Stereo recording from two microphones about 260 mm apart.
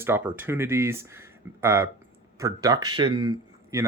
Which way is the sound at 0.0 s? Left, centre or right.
Centre.